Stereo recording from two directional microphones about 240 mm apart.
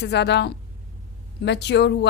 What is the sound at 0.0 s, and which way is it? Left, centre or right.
A woman's voice, left.